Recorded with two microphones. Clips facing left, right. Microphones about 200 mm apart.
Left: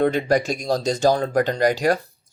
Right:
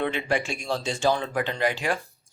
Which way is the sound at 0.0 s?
40° left (ahead or behind).